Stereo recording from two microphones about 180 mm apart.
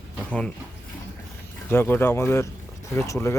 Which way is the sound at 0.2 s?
5° left (ahead or behind).